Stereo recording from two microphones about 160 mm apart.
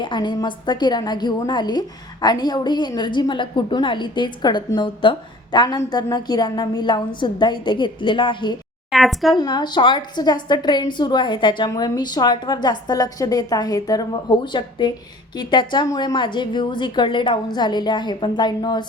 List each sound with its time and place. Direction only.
0.0 s a woman's voice: 30° left (ahead or behind)
8.9 s a woman's voice: centre (ahead or behind)
9.4 s a woman's voice: 25° left (ahead or behind)